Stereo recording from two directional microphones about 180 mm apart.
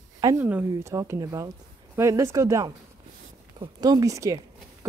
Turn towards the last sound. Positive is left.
turn(degrees=-20)  # may be behind; listen again after turning